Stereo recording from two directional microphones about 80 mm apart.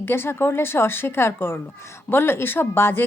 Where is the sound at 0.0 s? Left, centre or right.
Left.